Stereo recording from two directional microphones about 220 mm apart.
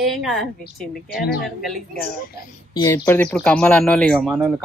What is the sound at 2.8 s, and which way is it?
Speech, 10° left (ahead or behind).